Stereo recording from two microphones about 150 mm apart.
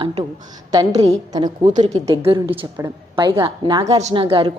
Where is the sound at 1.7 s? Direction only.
55° right (ahead or behind).